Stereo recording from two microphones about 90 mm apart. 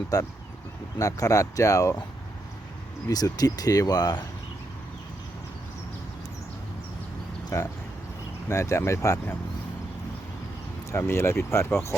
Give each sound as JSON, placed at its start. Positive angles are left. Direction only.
{"t": 0.1, "sound": "speech", "side_deg": 40}
{"t": 3.1, "sound": "speech", "side_deg": 45}
{"t": 7.5, "sound": "speech", "side_deg": 35}
{"t": 10.9, "sound": "speech", "side_deg": 25}